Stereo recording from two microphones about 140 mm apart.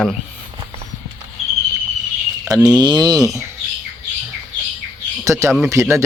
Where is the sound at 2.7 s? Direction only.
30° right (ahead or behind).